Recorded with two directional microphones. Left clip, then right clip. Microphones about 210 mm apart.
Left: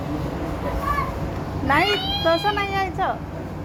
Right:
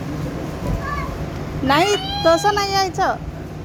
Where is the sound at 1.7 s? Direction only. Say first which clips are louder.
Right 3 dB; 40° right (ahead or behind).